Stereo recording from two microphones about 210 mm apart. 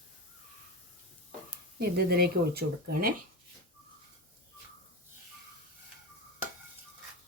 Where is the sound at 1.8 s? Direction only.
50° right (ahead or behind).